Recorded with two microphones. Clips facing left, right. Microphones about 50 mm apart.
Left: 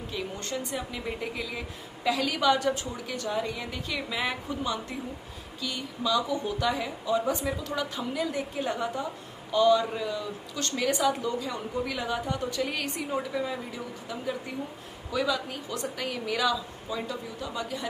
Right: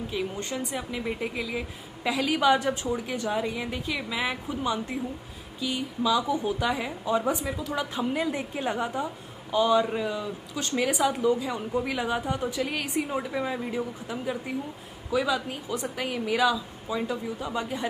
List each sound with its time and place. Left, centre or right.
0.1 s a woman's voice: centre
5.6 s a woman's voice: centre
7.3 s a woman's voice: centre
7.9 s a woman's voice: right
12.5 s a woman's voice: centre
13.3 s a woman's voice: right